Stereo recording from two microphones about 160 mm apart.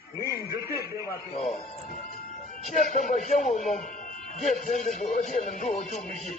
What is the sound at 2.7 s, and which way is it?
Speech, 50° left (ahead or behind).